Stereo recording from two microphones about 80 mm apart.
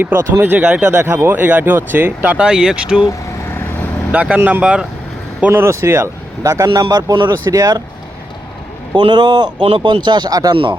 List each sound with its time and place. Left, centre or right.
0.0 s speech: right; by 3.1 s centre
4.1 s speech: centre
4.4 s speech: right
4.6 s speech: centre
5.5 s speech: right
6.8 s speech: right
9.0 s speech: right
10.5 s speech: right